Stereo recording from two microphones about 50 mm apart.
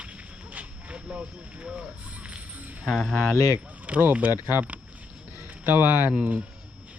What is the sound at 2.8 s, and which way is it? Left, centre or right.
Speech, centre.